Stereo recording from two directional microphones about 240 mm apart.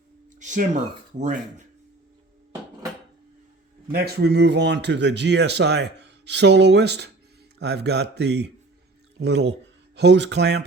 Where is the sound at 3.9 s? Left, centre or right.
Right.